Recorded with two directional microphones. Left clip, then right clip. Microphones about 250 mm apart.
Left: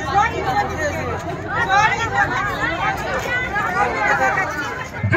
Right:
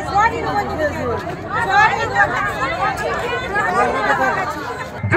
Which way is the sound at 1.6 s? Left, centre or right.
Centre.